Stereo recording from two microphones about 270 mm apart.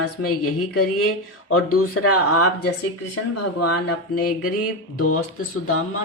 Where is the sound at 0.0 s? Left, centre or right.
Left.